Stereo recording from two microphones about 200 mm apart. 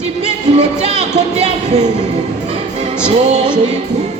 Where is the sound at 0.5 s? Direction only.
30° right (ahead or behind).